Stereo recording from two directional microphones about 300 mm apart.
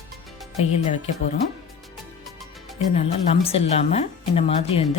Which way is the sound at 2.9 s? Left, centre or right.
Left.